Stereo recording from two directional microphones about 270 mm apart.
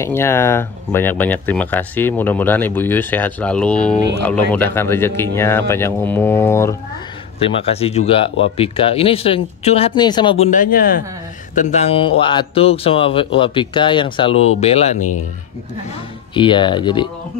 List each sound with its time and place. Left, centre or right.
0.0 s speech: centre
7.3 s speech: left
16.3 s speech: centre